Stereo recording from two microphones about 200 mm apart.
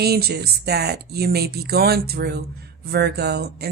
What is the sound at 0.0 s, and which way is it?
Speech, 50° right (ahead or behind).